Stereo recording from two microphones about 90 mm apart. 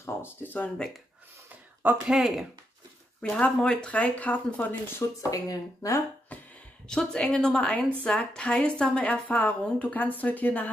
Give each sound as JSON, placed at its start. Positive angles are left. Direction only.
{"t": 0.0, "sound": "speech", "side_deg": 25}
{"t": 2.0, "sound": "speech", "side_deg": 0}
{"t": 3.2, "sound": "a woman's voice", "side_deg": 15}
{"t": 5.3, "sound": "speech", "side_deg": 40}
{"t": 6.9, "sound": "a woman's voice", "side_deg": 10}